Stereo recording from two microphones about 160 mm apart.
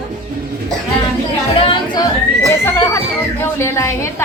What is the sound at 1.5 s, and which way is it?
Speech, 35° left (ahead or behind).